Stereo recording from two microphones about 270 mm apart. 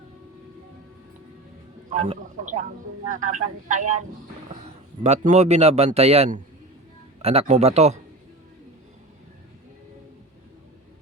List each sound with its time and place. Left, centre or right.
1.9 s a man's voice: right
5.0 s a man's voice: right